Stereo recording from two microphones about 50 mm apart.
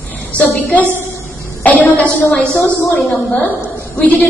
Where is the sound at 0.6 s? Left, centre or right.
Left.